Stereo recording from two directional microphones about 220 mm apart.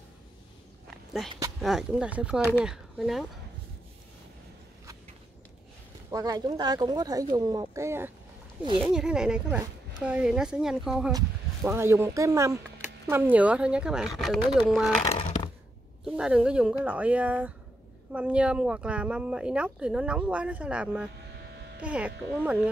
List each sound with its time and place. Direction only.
1.6 s speech: centre (ahead or behind)
6.1 s speech: 15° right (ahead or behind)
11.1 s speech: 15° right (ahead or behind)
15.1 s a sound: 25° left (ahead or behind)
16.0 s speech: 5° right (ahead or behind)